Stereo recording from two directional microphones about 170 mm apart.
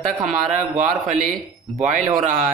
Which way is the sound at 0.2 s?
45° right (ahead or behind).